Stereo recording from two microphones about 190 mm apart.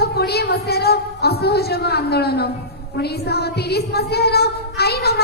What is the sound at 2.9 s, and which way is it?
A woman's voice, 55° left (ahead or behind).